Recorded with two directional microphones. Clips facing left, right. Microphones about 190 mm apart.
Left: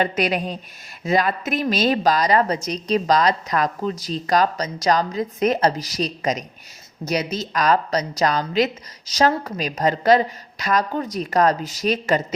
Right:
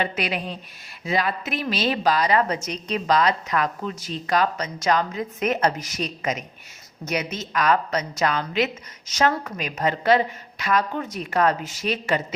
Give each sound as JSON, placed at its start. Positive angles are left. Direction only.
{"t": 0.0, "sound": "a woman's voice", "side_deg": 45}